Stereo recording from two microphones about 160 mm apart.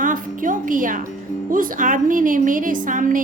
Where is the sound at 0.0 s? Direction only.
55° right (ahead or behind).